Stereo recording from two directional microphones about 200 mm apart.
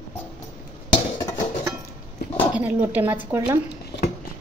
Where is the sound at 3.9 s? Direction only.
55° left (ahead or behind).